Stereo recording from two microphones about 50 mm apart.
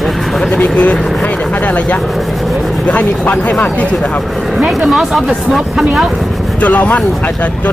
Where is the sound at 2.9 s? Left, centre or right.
Left.